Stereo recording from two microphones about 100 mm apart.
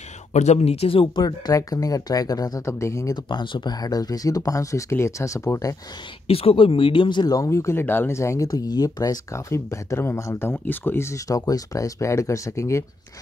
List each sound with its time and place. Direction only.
0.6 s speech: 90° left; by 1.2 s 65° left (ahead or behind)
1.2 s speech: 40° left (ahead or behind)
3.3 s speech: 50° left (ahead or behind); by 5.8 s 35° left (ahead or behind)
6.2 s speech: 75° left (ahead or behind); by 7.3 s 50° left (ahead or behind)
7.3 s speech: 30° left (ahead or behind)